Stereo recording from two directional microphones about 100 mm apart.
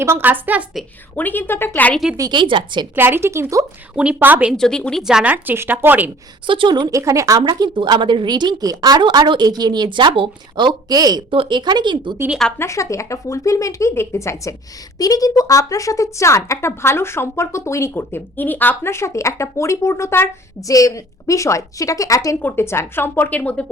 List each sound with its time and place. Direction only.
0.0 s speech: 25° right (ahead or behind)
1.1 s a woman's voice: 20° left (ahead or behind)
2.3 s a woman's voice: 55° right (ahead or behind)
2.9 s speech: 20° right (ahead or behind)
3.9 s speech: 10° right (ahead or behind)
4.5 s speech: 5° left (ahead or behind)
5.0 s speech: 10° right (ahead or behind)
6.5 s a woman's voice: 55° right (ahead or behind)
6.9 s a woman's voice: 35° right (ahead or behind)
11.3 s a woman's voice: 55° right (ahead or behind)
12.5 s a woman's voice: 30° left (ahead or behind); by 23.6 s 15° left (ahead or behind)